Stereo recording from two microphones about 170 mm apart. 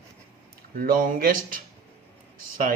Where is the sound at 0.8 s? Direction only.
55° right (ahead or behind).